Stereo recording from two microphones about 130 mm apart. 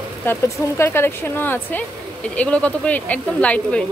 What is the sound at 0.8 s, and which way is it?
A woman's voice, 20° left (ahead or behind).